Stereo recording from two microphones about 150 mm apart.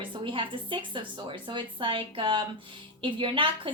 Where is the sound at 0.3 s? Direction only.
35° right (ahead or behind).